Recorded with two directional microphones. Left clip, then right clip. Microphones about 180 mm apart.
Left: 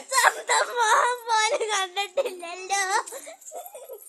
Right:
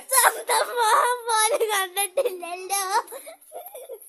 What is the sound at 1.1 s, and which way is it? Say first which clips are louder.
A child's voice: right 1 dB; 40° right (ahead or behind).